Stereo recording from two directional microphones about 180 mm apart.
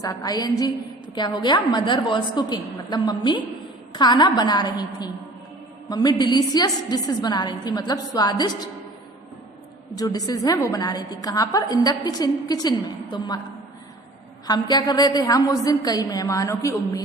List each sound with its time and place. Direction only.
0.0 s a woman's voice: 20° left (ahead or behind)
10.0 s a woman's voice: 20° left (ahead or behind)
14.4 s a woman's voice: 25° left (ahead or behind)